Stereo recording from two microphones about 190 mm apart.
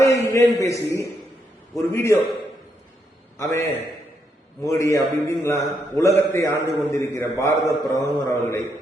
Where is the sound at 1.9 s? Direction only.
15° left (ahead or behind).